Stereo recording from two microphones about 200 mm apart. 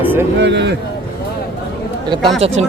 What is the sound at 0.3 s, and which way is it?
Speech, 60° right (ahead or behind).